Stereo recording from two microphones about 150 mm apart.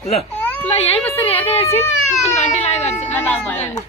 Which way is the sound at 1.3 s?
40° left (ahead or behind).